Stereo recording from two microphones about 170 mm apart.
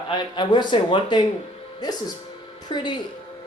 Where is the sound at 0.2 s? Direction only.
25° left (ahead or behind).